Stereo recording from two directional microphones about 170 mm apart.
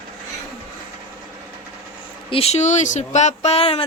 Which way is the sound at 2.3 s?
35° left (ahead or behind).